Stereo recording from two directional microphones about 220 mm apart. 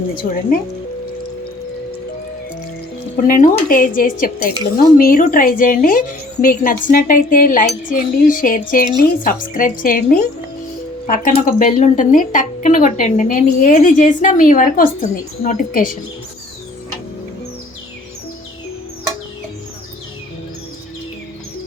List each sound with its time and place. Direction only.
3.2 s a woman's voice: 40° left (ahead or behind)